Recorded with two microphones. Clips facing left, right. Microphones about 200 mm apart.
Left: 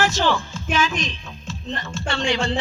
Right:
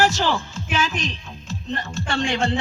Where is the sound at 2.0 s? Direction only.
50° right (ahead or behind).